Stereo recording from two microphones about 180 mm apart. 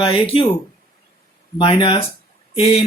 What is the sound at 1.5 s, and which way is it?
Speech, 25° left (ahead or behind).